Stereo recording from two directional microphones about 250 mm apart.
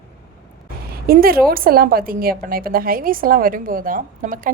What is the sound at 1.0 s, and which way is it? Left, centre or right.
A woman's voice, right.